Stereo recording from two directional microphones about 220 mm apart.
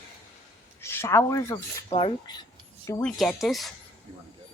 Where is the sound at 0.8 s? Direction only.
10° left (ahead or behind).